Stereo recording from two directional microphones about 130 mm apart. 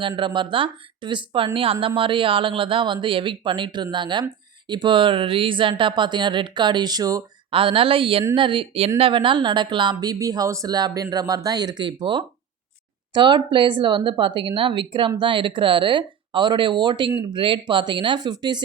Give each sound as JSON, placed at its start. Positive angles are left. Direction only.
{"t": 0.2, "sound": "a woman's voice", "side_deg": -40}
{"t": 7.5, "sound": "a woman's voice", "side_deg": -45}